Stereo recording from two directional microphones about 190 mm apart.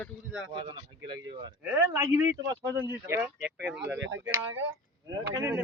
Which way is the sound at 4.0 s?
80° right.